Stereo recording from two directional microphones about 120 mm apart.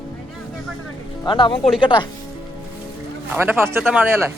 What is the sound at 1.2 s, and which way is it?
Speech, 40° left (ahead or behind).